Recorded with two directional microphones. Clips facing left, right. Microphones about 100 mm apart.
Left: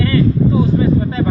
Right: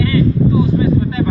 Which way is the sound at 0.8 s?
35° left (ahead or behind).